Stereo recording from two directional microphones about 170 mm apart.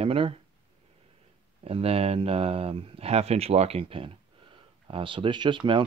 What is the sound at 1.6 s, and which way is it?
Speech, 35° right (ahead or behind).